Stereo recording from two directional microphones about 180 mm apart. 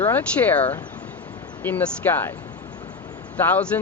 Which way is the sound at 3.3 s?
10° left (ahead or behind).